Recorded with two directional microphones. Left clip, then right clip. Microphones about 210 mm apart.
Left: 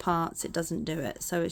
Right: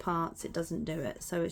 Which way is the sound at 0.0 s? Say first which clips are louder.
Left 4 dB; 40° left (ahead or behind).